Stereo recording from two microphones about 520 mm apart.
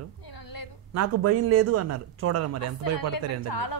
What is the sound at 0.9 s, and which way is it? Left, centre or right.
A man's voice, right.